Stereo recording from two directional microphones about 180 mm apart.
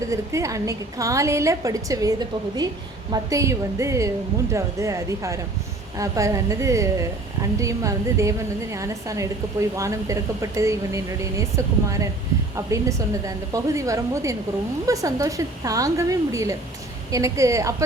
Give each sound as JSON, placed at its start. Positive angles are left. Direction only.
{"t": 0.1, "sound": "a woman's voice", "side_deg": -15}
{"t": 13.2, "sound": "a woman's voice", "side_deg": -20}